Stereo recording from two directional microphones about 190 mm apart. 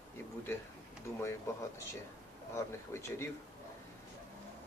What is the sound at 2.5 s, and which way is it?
Speech, 15° left (ahead or behind).